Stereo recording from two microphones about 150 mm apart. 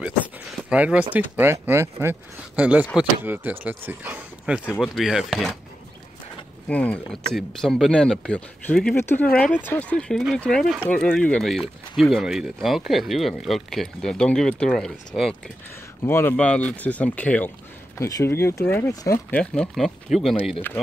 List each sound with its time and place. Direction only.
0.0 s a sound: 10° right (ahead or behind)
1.1 s speech: 15° right (ahead or behind)
4.7 s speech: centre (ahead or behind)
6.7 s speech: 10° left (ahead or behind)
16.1 s speech: 15° left (ahead or behind)
17.9 s speech: 20° left (ahead or behind)
19.3 s speech: 5° left (ahead or behind)